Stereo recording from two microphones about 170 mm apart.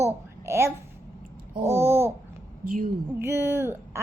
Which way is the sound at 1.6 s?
15° right (ahead or behind).